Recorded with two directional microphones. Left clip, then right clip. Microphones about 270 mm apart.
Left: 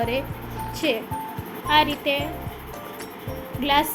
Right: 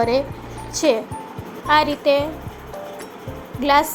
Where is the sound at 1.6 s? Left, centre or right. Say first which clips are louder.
Right 3 dB; centre.